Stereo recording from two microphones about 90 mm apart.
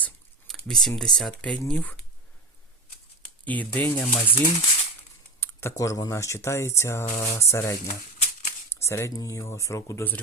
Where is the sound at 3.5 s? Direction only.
15° left (ahead or behind).